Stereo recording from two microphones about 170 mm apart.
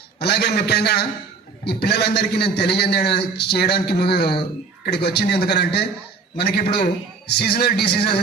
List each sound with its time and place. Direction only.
0.2 s a man's voice: 75° left (ahead or behind)